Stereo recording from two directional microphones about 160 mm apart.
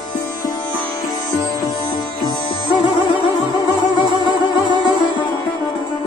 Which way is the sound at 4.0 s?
30° left (ahead or behind).